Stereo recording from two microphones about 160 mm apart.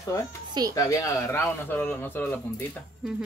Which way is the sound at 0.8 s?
20° left (ahead or behind).